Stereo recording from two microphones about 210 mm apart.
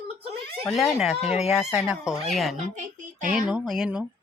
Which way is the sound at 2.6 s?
35° right (ahead or behind).